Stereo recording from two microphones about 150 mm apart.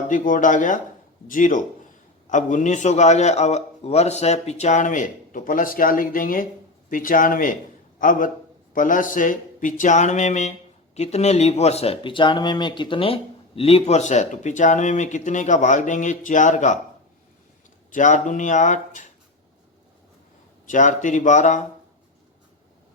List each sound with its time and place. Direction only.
0.1 s a man's voice: 60° left (ahead or behind)
17.9 s a man's voice: 55° left (ahead or behind)
20.7 s a man's voice: 55° left (ahead or behind)